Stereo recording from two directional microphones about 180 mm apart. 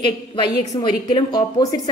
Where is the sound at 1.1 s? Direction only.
20° left (ahead or behind).